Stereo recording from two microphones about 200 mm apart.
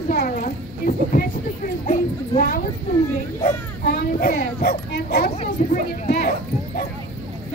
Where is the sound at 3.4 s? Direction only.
45° left (ahead or behind).